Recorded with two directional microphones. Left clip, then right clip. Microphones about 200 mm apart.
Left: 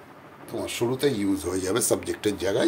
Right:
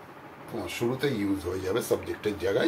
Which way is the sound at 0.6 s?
60° left (ahead or behind).